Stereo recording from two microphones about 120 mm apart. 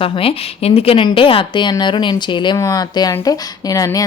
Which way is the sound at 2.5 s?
30° left (ahead or behind).